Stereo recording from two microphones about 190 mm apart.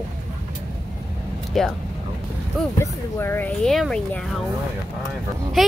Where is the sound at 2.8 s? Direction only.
10° left (ahead or behind).